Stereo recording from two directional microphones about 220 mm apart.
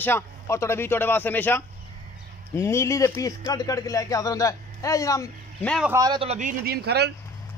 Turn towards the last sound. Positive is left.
turn(degrees=-45)  # may be behind; listen again after turning